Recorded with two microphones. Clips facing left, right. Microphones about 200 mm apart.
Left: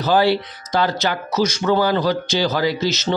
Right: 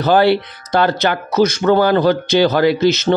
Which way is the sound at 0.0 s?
60° right (ahead or behind).